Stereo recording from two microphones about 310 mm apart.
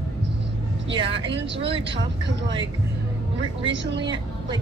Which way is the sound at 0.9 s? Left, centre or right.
Centre.